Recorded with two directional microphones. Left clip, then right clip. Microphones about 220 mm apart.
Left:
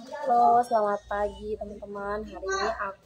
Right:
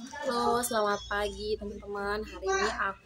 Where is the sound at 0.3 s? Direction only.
30° right (ahead or behind).